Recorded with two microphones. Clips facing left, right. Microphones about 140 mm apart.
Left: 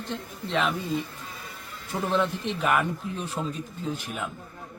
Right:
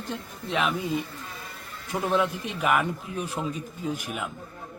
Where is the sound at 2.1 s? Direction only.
5° right (ahead or behind).